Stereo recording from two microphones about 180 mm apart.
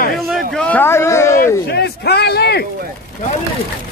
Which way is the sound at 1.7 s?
65° left (ahead or behind).